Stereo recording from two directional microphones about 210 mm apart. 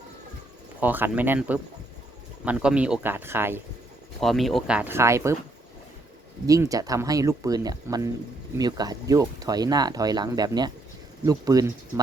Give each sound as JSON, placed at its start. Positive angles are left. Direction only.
{"t": 0.8, "sound": "speech", "side_deg": -10}
{"t": 4.2, "sound": "speech", "side_deg": 0}
{"t": 6.5, "sound": "speech", "side_deg": -15}